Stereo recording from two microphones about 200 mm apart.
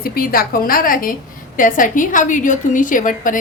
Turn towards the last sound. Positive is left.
turn(degrees=40)  # may be behind; listen again after turning